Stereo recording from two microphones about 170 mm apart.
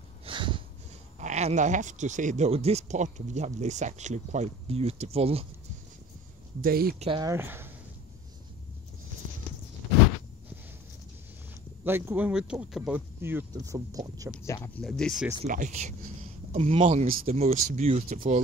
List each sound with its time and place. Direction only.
0.2 s snort: 30° right (ahead or behind)
1.2 s speech: 45° right (ahead or behind)
6.6 s speech: 60° right (ahead or behind)
7.2 s speech: 15° right (ahead or behind)
11.8 s speech: 15° right (ahead or behind)
13.2 s speech: 15° right (ahead or behind)
14.4 s speech: 15° left (ahead or behind)
14.8 s speech: 5° left (ahead or behind)
15.4 s speech: 45° right (ahead or behind)